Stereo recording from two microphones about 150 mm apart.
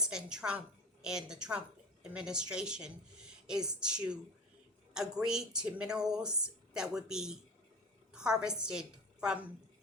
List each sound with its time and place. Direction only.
0.0 s a woman's voice: 5° right (ahead or behind)